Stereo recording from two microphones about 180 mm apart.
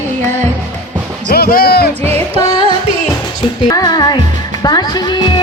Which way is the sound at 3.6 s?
20° left (ahead or behind).